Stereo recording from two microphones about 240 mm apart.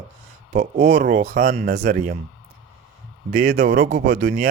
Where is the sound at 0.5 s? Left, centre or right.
Right.